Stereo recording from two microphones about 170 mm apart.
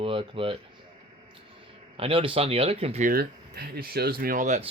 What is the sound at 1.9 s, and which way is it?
Speech, 35° right (ahead or behind).